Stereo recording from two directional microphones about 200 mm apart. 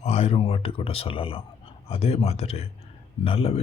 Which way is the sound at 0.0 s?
30° left (ahead or behind).